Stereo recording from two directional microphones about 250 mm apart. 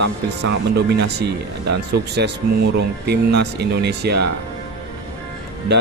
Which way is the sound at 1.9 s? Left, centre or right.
Right.